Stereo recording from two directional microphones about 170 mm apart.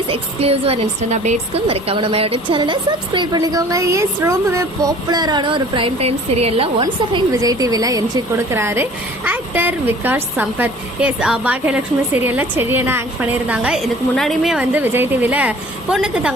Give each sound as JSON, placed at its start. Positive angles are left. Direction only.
{"t": 0.1, "sound": "a woman's voice", "side_deg": -35}